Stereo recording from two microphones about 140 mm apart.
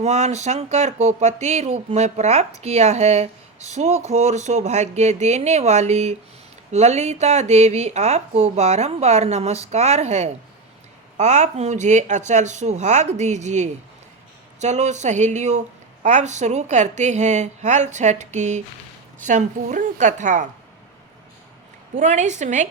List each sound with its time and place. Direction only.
0.0 s a woman's voice: 55° right (ahead or behind)
21.9 s a woman's voice: 55° right (ahead or behind)